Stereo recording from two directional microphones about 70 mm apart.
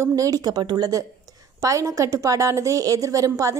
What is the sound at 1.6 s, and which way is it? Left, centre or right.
A woman's voice, right.